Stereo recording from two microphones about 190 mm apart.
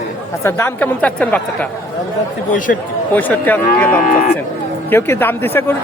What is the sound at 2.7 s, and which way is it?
Speech, 55° left (ahead or behind).